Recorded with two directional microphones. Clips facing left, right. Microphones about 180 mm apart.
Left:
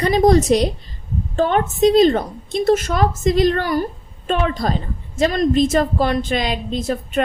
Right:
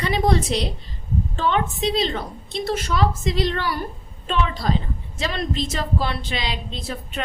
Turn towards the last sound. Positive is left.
turn(degrees=45)  # may be behind; listen again after turning